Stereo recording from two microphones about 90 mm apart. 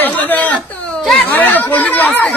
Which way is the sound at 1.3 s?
20° left (ahead or behind).